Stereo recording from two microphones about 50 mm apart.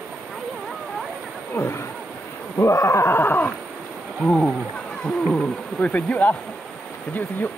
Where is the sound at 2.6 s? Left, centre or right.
Left.